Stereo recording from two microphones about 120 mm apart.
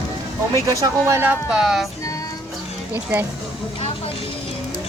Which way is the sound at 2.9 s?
20° right (ahead or behind).